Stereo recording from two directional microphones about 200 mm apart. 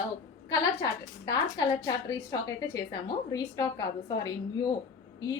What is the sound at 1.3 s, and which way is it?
A woman's voice, 20° left (ahead or behind).